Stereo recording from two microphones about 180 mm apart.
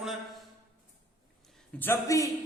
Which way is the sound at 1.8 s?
15° left (ahead or behind).